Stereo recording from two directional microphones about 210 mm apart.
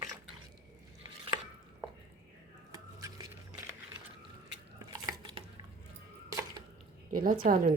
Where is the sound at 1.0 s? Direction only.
15° right (ahead or behind).